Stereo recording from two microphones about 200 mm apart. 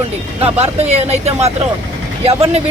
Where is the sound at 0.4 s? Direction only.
30° right (ahead or behind).